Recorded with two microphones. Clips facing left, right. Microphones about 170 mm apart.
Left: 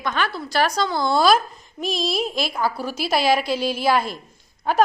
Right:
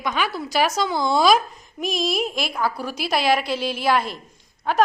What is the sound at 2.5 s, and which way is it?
A woman's voice, 5° left (ahead or behind).